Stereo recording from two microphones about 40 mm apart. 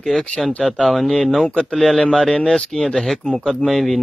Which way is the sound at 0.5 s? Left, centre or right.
Left.